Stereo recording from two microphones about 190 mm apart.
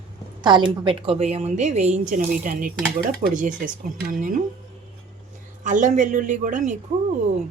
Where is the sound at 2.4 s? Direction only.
45° right (ahead or behind).